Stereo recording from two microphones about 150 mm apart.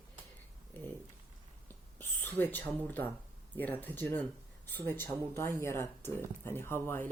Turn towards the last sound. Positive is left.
turn(degrees=15)  # may be behind; listen again after turning